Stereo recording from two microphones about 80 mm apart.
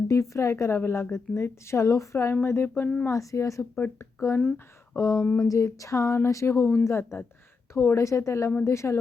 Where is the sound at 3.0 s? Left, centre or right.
Left.